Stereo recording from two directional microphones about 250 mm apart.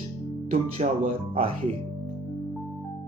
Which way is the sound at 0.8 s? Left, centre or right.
Right.